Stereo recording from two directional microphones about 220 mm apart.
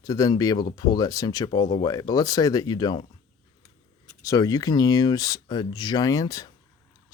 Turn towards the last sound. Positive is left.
turn(degrees=15)  # may be behind; listen again after turning